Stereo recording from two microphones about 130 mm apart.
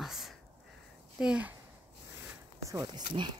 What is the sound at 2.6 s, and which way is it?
Speech, 25° right (ahead or behind).